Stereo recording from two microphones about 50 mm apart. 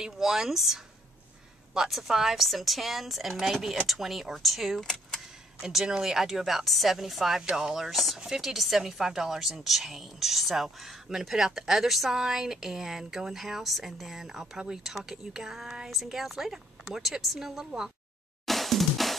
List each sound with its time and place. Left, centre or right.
0.0 s a woman's voice: centre
18.4 s music: centre